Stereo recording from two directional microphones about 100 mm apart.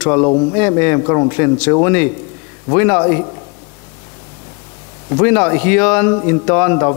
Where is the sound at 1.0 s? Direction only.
30° left (ahead or behind).